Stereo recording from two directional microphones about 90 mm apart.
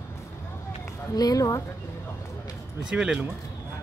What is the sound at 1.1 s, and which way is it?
Speech, 45° left (ahead or behind).